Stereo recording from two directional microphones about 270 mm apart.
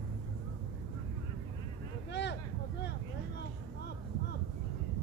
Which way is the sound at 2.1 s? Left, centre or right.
Left.